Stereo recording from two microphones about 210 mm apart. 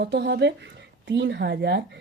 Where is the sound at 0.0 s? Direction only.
55° right (ahead or behind).